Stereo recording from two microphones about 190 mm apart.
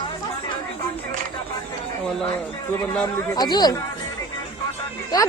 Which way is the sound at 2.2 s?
10° left (ahead or behind).